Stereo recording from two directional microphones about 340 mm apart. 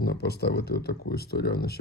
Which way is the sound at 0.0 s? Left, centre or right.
Left.